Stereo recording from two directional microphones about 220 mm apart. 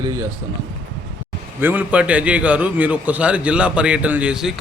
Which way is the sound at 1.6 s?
10° right (ahead or behind).